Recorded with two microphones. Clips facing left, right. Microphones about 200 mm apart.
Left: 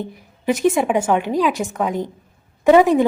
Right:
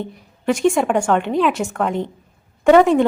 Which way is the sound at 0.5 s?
Centre (ahead or behind).